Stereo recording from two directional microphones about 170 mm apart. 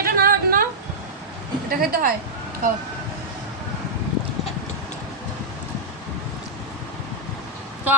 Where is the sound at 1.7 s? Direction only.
55° right (ahead or behind).